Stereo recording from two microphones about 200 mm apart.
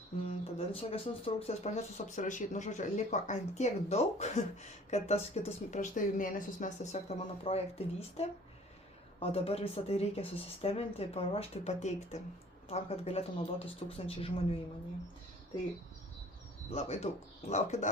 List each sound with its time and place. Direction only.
0.3 s speech: 30° left (ahead or behind)
16.7 s speech: 30° left (ahead or behind)